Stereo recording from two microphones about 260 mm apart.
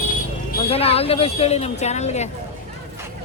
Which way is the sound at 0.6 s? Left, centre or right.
Left.